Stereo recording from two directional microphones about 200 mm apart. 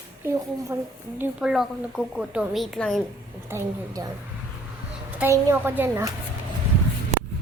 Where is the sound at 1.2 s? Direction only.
5° right (ahead or behind).